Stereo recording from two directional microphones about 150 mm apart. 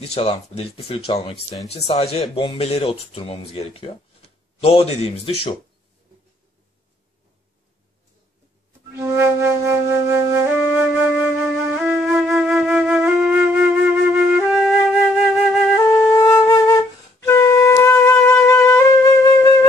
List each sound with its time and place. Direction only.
0.0 s speech: 45° left (ahead or behind)
8.9 s flute: 15° right (ahead or behind); by 15.7 s centre (ahead or behind)
15.8 s flute: 20° left (ahead or behind)
17.2 s wind instrument: 20° left (ahead or behind)